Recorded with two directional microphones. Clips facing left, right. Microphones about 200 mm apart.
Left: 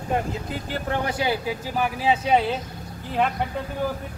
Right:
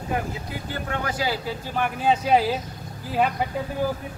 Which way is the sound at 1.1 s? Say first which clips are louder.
Left 2 dB; 20° left (ahead or behind).